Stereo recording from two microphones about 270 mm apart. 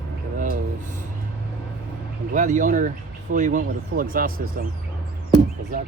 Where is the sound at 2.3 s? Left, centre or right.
Right.